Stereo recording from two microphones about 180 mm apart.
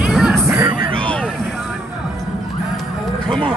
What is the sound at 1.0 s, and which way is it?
Vehicle, 5° left (ahead or behind).